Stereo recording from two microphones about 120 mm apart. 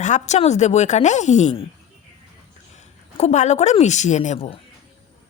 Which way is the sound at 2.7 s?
70° left (ahead or behind).